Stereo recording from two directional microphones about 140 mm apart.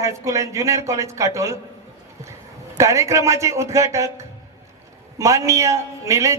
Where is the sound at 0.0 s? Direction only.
20° right (ahead or behind).